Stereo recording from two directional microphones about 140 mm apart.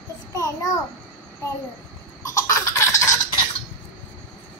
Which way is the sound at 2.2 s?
25° left (ahead or behind).